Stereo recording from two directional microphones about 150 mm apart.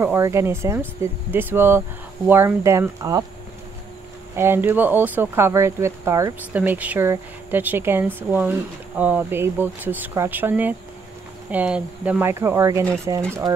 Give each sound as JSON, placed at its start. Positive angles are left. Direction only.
{"t": 0.0, "sound": "speech", "side_deg": -15}
{"t": 4.4, "sound": "speech", "side_deg": -15}